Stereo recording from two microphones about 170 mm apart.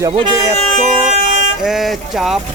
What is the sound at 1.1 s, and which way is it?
Vehicle, 45° right (ahead or behind).